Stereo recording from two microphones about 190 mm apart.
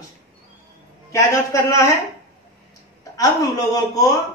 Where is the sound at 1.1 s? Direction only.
15° left (ahead or behind).